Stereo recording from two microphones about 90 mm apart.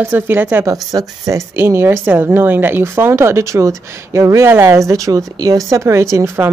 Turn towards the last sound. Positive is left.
turn(degrees=-30)  # may be behind; listen again after turning